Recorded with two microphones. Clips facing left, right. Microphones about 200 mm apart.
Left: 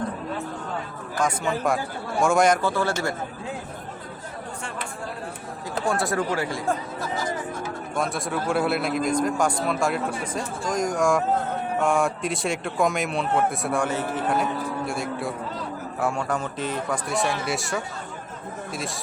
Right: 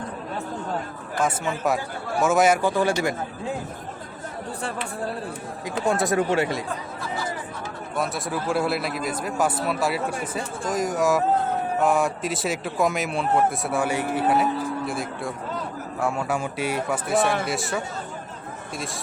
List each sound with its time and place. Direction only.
1.2 s a man's voice: 5° right (ahead or behind)
5.6 s speech: 20° right (ahead or behind)
7.9 s a man's voice: centre (ahead or behind)